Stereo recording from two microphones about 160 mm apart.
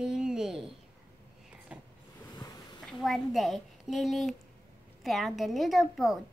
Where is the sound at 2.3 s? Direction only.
25° left (ahead or behind).